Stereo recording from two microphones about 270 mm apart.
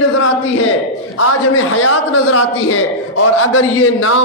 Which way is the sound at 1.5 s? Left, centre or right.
Left.